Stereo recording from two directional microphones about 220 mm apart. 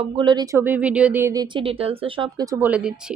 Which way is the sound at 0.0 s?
25° right (ahead or behind).